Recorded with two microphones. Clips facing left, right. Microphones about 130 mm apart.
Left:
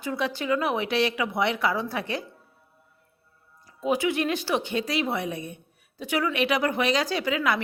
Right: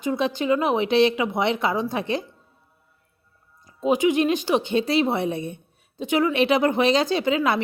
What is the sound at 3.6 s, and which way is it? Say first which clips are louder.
Speech: right 5 dB; 20° right (ahead or behind).